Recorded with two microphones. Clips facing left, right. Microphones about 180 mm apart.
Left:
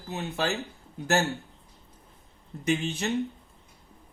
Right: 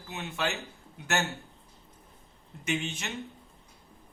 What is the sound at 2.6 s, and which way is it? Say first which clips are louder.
Speech: left 5 dB; 35° left (ahead or behind).